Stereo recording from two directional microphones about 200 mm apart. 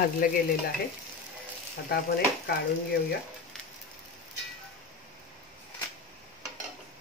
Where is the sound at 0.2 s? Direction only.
45° left (ahead or behind).